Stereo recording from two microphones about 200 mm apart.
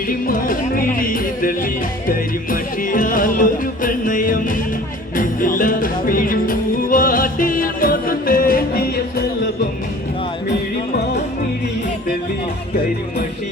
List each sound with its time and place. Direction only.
0.1 s speech: 45° left (ahead or behind)
0.9 s music: 45° left (ahead or behind)